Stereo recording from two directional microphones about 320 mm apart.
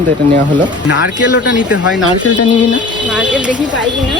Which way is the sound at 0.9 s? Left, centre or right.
Left.